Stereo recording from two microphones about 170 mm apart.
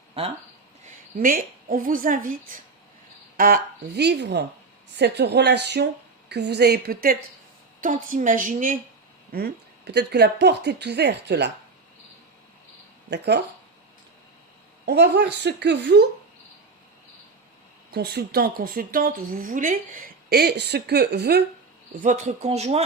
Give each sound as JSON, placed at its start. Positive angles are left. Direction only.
{"t": 0.9, "sound": "a woman's voice", "side_deg": -55}
{"t": 7.8, "sound": "a woman's voice", "side_deg": -50}
{"t": 9.3, "sound": "a woman's voice", "side_deg": -75}
{"t": 13.1, "sound": "a woman's voice", "side_deg": -85}
{"t": 14.8, "sound": "a woman's voice", "side_deg": -70}
{"t": 17.9, "sound": "speech", "side_deg": -65}
{"t": 22.0, "sound": "speech", "side_deg": -45}